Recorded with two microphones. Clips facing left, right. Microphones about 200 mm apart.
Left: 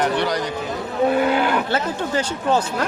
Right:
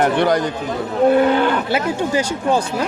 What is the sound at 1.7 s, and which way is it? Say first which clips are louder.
Speech: right 4 dB; 10° right (ahead or behind).